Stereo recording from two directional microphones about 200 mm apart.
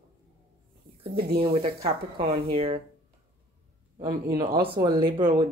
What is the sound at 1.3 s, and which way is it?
Speech, 30° right (ahead or behind).